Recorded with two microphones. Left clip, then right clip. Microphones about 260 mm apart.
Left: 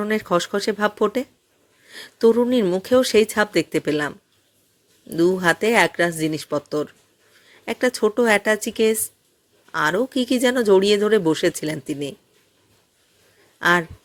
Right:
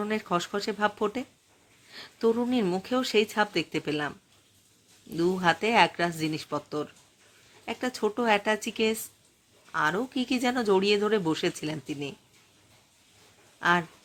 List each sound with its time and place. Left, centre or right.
0.0 s speech: centre
5.1 s speech: centre
13.6 s speech: centre